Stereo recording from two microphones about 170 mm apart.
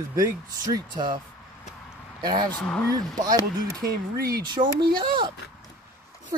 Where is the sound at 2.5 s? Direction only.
5° left (ahead or behind).